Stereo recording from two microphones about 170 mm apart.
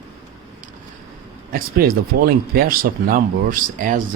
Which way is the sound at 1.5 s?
60° right (ahead or behind).